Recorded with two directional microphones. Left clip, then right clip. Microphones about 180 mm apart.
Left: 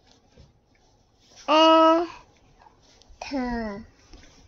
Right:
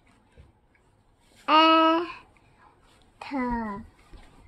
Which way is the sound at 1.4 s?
30° right (ahead or behind).